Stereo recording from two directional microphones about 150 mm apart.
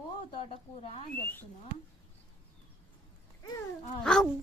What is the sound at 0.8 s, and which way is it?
Speech, 40° left (ahead or behind).